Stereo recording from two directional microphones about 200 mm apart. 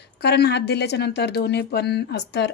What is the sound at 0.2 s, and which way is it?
A woman's voice, 55° left (ahead or behind).